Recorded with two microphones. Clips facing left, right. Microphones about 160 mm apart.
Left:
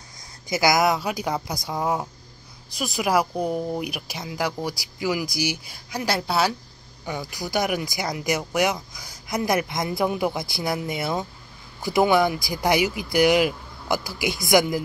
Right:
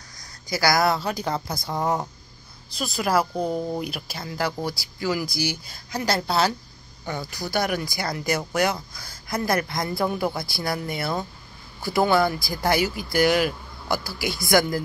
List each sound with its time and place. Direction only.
0.2 s speech: 20° left (ahead or behind)